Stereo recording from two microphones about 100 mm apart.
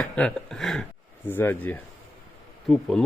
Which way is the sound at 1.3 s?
20° left (ahead or behind).